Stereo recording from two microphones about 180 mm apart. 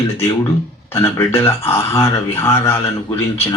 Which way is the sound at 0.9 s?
15° left (ahead or behind).